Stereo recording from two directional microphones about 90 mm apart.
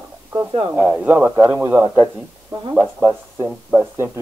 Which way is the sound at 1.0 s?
20° right (ahead or behind).